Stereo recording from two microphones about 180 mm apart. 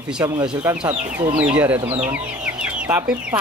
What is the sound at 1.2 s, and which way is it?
Speech, 35° right (ahead or behind).